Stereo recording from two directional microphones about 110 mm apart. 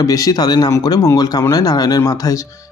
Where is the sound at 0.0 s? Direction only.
30° left (ahead or behind).